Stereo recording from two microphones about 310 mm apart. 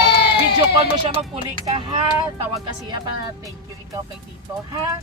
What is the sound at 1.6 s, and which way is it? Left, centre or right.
Speech, centre.